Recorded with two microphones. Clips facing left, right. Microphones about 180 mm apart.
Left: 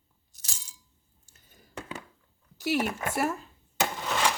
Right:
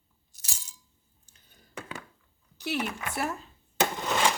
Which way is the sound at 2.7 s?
45° left (ahead or behind).